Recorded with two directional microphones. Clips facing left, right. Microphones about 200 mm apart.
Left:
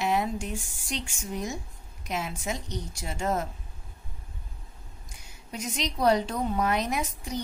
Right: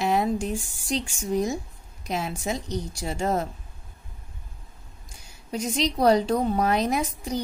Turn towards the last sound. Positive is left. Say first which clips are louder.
# right 5 dB
turn(degrees=-35)  # may be behind; listen again after turning